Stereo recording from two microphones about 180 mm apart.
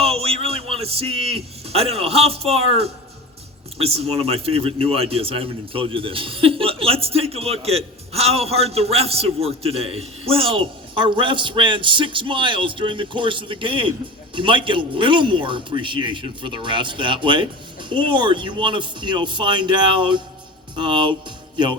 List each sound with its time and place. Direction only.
0.0 s music: 35° right (ahead or behind)
0.4 s a man's voice: 35° right (ahead or behind)